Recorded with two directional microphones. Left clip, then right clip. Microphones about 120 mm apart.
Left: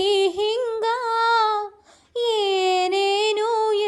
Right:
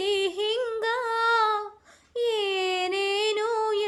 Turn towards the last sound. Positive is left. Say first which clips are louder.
# left 5 dB
turn(degrees=25)  # may be behind; listen again after turning